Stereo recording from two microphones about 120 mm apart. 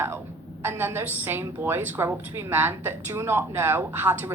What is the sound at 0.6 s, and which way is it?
A woman's voice, 20° right (ahead or behind).